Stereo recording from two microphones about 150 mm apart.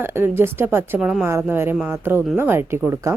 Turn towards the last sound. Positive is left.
turn(degrees=-15)  # may be behind; listen again after turning